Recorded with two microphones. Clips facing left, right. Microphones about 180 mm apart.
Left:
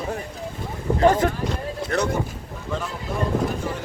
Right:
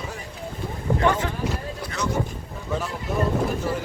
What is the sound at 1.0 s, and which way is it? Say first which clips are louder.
Speech: left 6 dB; 40° left (ahead or behind).